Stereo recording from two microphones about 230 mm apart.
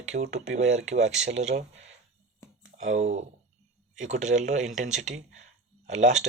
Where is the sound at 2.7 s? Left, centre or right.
Right.